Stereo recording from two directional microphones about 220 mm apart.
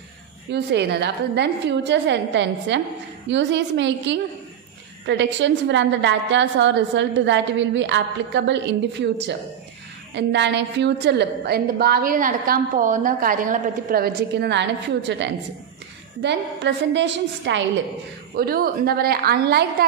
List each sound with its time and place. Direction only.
0.5 s a woman's voice: 50° right (ahead or behind)
18.3 s a woman's voice: 40° right (ahead or behind)